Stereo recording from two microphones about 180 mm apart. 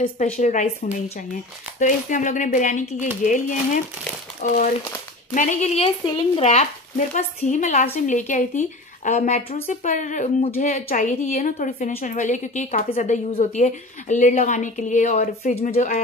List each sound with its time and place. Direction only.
0.0 s a woman's voice: 45° left (ahead or behind)